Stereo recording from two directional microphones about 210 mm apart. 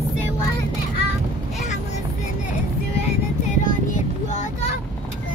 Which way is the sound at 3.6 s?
40° left (ahead or behind).